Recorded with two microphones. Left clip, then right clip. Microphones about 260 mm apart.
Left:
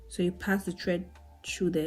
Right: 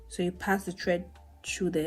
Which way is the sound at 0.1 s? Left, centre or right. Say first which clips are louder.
Right 1 dB; centre.